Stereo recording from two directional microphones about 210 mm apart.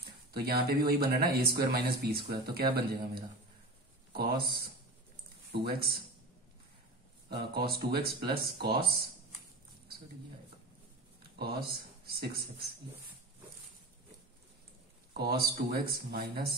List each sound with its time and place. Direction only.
0.3 s speech: 45° right (ahead or behind)
4.1 s speech: 45° right (ahead or behind)
5.5 s speech: 50° right (ahead or behind)
7.2 s speech: 50° right (ahead or behind)
11.3 s speech: 45° right (ahead or behind)
15.1 s speech: 45° right (ahead or behind)